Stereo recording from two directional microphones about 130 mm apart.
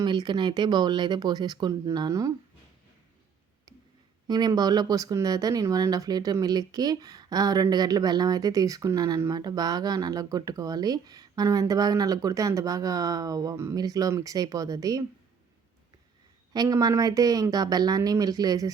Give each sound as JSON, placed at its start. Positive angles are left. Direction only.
{"t": 0.0, "sound": "speech", "side_deg": -35}
{"t": 4.3, "sound": "speech", "side_deg": -30}
{"t": 16.5, "sound": "speech", "side_deg": -30}